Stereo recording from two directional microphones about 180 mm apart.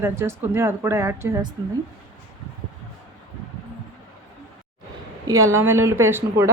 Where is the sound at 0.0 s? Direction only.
15° right (ahead or behind).